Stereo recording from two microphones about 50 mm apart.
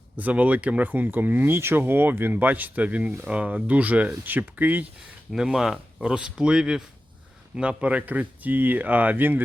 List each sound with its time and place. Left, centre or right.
0.2 s speech: right
1.5 s speech: right
1.8 s speech: right
5.3 s speech: centre
7.5 s speech: right